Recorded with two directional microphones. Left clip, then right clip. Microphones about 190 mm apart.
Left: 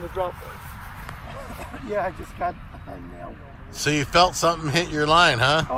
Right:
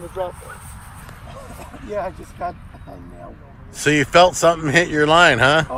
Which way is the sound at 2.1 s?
25° left (ahead or behind).